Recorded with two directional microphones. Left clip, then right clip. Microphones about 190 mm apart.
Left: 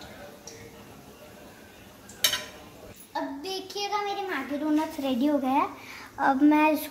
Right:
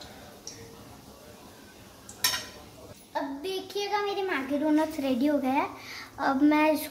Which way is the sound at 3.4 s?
25° right (ahead or behind).